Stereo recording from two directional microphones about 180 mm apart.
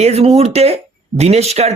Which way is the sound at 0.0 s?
35° right (ahead or behind).